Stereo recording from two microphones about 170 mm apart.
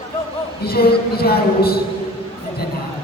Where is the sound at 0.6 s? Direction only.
65° left (ahead or behind).